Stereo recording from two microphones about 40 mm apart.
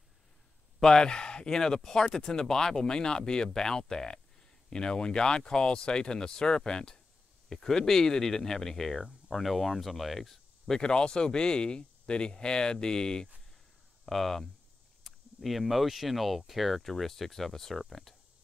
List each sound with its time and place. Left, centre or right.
0.8 s speech: centre
10.8 s speech: left
14.0 s speech: centre